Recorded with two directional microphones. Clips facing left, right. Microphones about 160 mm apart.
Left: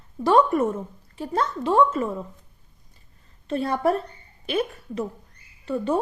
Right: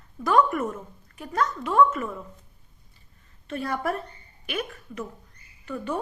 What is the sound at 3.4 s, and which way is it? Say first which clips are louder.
A woman's voice: left 6 dB; 30° left (ahead or behind).